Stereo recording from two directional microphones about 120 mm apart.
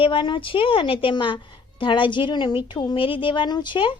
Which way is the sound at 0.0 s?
45° left (ahead or behind).